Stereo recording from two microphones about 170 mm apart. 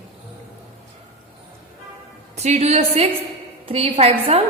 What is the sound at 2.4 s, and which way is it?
A woman's voice, 40° right (ahead or behind).